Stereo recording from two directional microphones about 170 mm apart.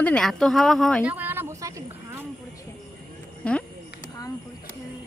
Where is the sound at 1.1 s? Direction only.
10° right (ahead or behind).